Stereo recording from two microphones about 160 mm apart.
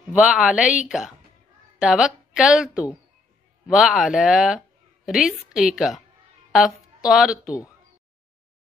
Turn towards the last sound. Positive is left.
turn(degrees=-5)  # may be behind; listen again after turning